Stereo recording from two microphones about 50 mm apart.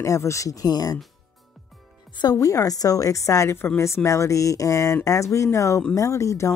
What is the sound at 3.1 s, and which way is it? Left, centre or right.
Speech, left.